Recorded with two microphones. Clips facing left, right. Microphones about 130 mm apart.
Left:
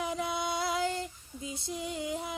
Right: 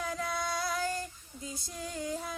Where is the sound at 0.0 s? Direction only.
20° left (ahead or behind).